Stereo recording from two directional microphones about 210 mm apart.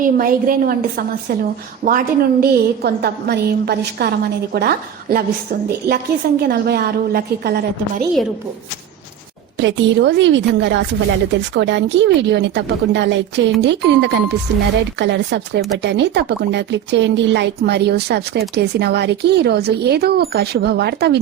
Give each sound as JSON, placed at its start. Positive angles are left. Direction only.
{"t": 0.0, "sound": "speech", "side_deg": -40}
{"t": 9.6, "sound": "a woman's voice", "side_deg": -60}